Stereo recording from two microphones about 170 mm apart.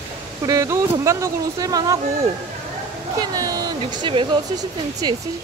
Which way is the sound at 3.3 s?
20° right (ahead or behind).